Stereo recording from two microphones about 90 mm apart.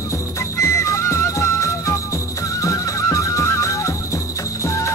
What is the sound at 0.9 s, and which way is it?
Music, 35° left (ahead or behind).